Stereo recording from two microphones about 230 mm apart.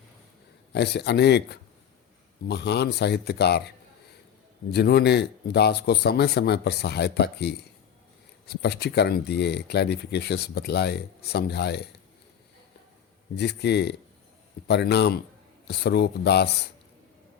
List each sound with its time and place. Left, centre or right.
0.7 s speech: left
4.7 s speech: left
13.3 s speech: left